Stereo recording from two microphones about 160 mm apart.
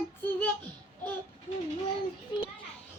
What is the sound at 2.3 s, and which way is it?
Speech, 30° left (ahead or behind).